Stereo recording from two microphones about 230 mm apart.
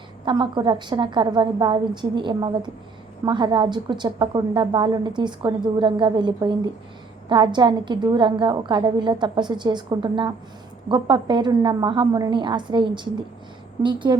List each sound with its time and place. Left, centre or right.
0.3 s a woman's voice: centre